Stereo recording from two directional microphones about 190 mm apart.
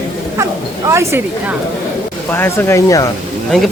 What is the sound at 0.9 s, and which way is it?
Speech, 15° right (ahead or behind).